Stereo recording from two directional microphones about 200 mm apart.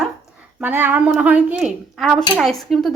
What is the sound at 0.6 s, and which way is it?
A woman's voice, 10° right (ahead or behind).